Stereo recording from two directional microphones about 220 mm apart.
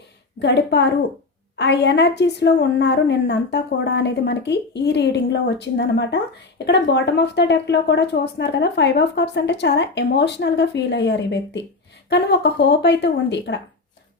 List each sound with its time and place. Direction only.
0.3 s speech: 50° left (ahead or behind)